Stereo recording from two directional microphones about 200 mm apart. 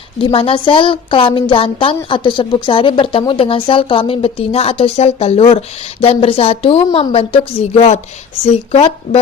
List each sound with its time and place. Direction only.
0.2 s a woman's voice: 25° left (ahead or behind)